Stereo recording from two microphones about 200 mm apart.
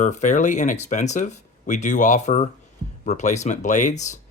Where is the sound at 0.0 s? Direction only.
35° left (ahead or behind).